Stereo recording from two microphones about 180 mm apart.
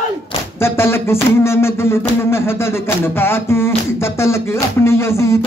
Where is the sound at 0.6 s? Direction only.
15° left (ahead or behind).